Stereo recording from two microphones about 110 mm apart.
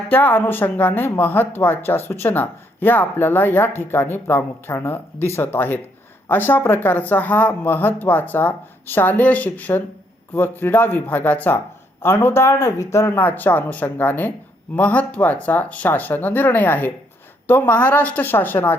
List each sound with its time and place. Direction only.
0.1 s speech: 15° left (ahead or behind)